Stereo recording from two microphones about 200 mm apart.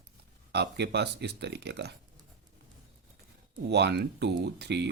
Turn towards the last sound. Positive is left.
turn(degrees=-55)  # may be behind; listen again after turning